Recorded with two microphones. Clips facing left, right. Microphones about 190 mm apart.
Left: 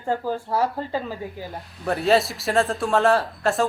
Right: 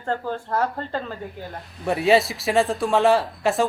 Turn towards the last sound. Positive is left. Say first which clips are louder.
# right 1 dB
turn(degrees=0)  # may be behind; listen again after turning